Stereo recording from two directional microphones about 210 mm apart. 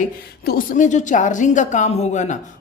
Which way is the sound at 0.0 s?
40° left (ahead or behind).